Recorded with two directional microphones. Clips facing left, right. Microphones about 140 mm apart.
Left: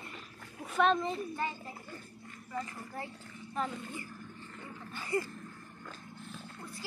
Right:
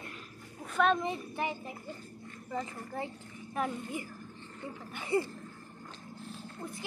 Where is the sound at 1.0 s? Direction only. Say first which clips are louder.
Even; 15° right (ahead or behind).